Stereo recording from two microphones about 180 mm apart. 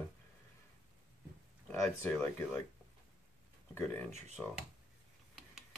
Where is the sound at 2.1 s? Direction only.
10° left (ahead or behind).